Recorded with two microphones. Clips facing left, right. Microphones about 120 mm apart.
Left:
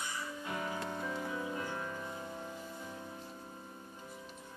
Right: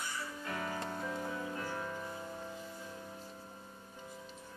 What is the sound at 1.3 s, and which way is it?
Music, 35° right (ahead or behind).